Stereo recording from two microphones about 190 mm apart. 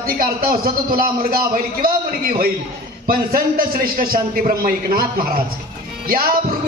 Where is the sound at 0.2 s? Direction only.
50° right (ahead or behind).